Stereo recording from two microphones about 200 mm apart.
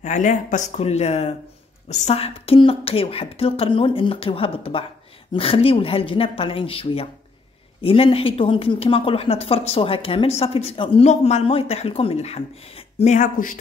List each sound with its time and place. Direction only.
0.0 s speech: 35° left (ahead or behind)